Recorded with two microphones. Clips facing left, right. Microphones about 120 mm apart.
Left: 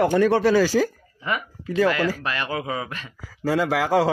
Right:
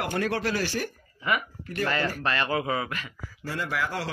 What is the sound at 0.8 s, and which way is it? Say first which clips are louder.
Speech: left 10 dB; 90° left.